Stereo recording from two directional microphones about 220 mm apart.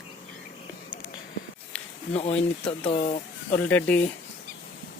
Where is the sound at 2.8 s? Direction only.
30° left (ahead or behind).